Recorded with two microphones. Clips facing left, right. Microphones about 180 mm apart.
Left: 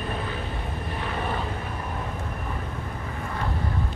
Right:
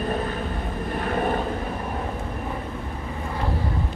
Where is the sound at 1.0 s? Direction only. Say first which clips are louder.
Right 6 dB; 45° right (ahead or behind).